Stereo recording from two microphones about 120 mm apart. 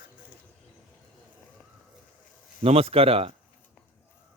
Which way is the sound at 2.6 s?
60° right (ahead or behind).